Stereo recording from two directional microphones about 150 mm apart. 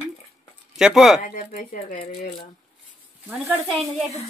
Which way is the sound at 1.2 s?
60° left (ahead or behind).